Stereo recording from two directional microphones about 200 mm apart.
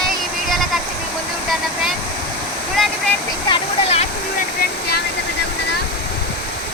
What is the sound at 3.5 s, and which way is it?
Speech, 30° left (ahead or behind).